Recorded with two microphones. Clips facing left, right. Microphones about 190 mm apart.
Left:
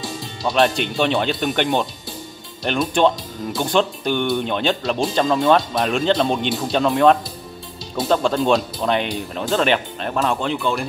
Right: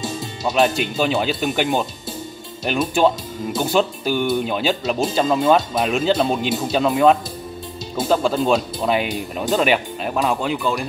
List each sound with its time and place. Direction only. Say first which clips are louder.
0.0 s music: right 2 dB; 20° right (ahead or behind)
0.5 s speech: even; 5° right (ahead or behind)